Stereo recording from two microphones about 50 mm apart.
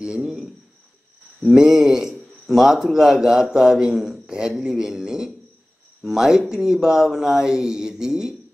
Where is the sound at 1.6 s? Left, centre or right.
Centre.